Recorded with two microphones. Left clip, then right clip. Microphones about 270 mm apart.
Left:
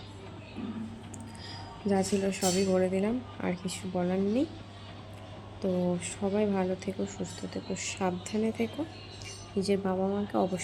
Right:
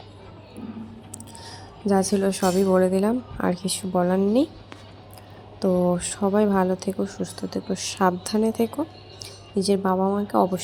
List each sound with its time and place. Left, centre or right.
1.9 s a woman's voice: centre
5.5 s a woman's voice: right